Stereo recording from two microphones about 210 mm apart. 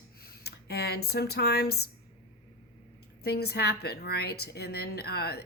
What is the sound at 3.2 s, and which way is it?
Speech, 50° left (ahead or behind).